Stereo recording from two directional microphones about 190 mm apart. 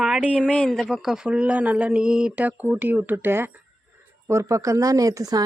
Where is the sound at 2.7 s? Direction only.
10° right (ahead or behind).